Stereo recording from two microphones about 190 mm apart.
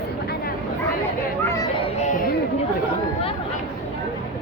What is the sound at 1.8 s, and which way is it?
Children playing, 40° left (ahead or behind).